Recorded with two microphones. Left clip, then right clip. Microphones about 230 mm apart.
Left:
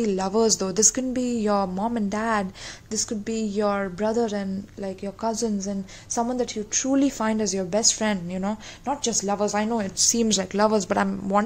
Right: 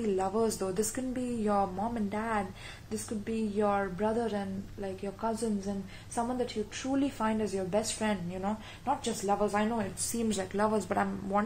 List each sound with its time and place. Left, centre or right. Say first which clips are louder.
0.0 s a woman's voice: left 7 dB; left